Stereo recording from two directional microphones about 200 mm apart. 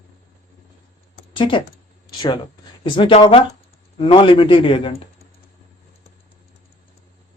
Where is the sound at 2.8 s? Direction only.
25° left (ahead or behind).